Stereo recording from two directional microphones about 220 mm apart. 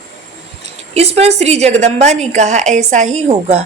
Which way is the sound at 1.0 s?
30° right (ahead or behind).